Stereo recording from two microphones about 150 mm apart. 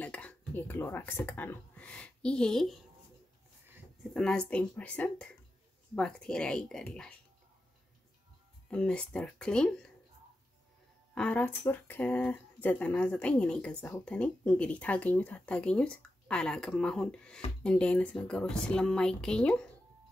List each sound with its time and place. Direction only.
0.0 s speech: 10° left (ahead or behind)
4.1 s speech: 5° left (ahead or behind)
8.6 s speech: 5° left (ahead or behind)
11.1 s speech: 10° left (ahead or behind)